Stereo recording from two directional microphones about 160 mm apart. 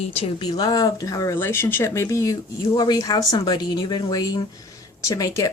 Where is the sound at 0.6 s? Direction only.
25° left (ahead or behind).